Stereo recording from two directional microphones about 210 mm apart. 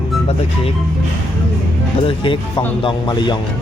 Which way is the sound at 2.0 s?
25° left (ahead or behind).